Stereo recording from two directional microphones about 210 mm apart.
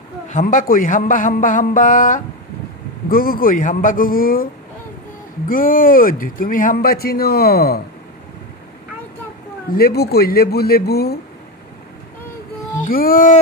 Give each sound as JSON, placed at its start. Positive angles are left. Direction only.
{"t": 0.3, "sound": "a man's voice", "side_deg": 40}
{"t": 5.5, "sound": "a man's voice", "side_deg": 40}
{"t": 9.8, "sound": "a man's voice", "side_deg": 45}
{"t": 12.8, "sound": "a man's voice", "side_deg": 40}